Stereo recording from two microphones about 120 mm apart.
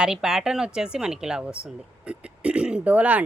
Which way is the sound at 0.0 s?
5° right (ahead or behind).